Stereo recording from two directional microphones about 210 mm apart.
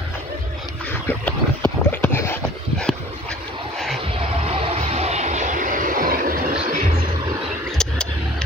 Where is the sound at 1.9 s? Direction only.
10° left (ahead or behind).